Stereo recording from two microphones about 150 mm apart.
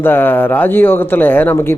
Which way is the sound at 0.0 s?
15° left (ahead or behind).